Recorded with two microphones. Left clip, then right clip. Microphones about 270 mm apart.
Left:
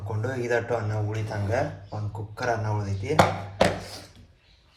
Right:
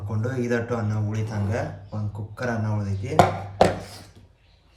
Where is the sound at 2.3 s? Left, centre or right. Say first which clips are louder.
Left 2 dB; centre.